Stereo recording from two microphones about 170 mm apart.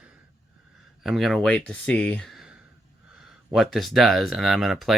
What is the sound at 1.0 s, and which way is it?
Speech, centre (ahead or behind).